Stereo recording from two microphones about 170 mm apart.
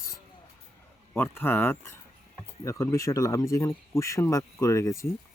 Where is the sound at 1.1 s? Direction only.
15° left (ahead or behind).